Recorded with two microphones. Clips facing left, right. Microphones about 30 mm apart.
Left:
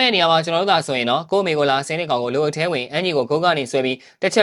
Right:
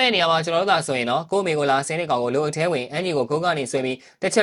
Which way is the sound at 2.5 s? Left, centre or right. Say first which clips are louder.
Left 2 dB; left.